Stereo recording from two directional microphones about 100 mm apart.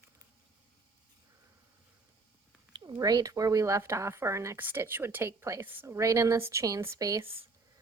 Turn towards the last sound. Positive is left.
turn(degrees=-25)  # may be behind; listen again after turning